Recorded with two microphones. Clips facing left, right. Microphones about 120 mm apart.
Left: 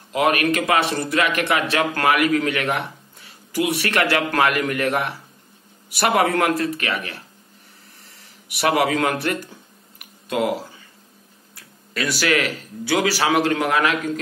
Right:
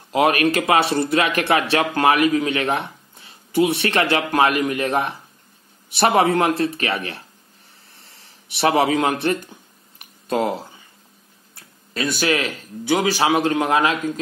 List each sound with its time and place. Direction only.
0.1 s speech: 35° right (ahead or behind)
8.0 s a sound: 25° right (ahead or behind)
10.2 s speech: 30° right (ahead or behind)